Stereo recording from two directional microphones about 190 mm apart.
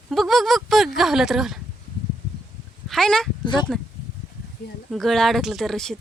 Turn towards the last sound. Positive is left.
turn(degrees=0)  # may be behind; listen again after turning